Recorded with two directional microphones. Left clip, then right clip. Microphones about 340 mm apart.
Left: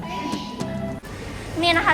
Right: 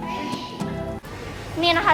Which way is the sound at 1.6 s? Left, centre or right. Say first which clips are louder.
Even; centre.